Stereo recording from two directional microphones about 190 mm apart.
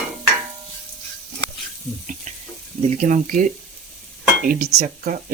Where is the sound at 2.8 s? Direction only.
40° right (ahead or behind).